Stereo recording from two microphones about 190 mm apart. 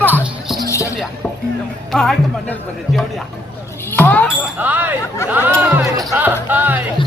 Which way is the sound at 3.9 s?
10° left (ahead or behind).